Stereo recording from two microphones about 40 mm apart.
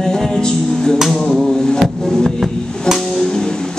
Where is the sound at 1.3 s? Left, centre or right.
Centre.